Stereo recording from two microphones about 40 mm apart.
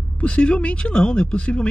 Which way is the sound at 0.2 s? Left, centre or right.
Left.